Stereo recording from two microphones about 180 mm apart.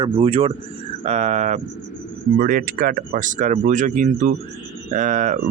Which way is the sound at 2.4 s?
55° right (ahead or behind).